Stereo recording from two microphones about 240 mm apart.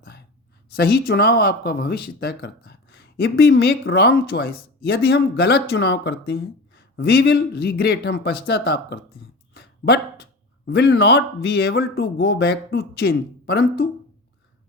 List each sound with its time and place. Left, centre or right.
0.8 s speech: left
9.6 s a sound: left
10.7 s speech: left